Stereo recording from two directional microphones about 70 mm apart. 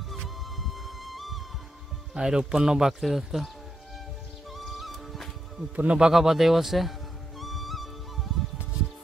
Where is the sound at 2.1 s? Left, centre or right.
Centre.